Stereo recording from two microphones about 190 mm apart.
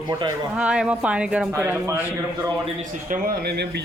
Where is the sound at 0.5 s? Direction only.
5° right (ahead or behind).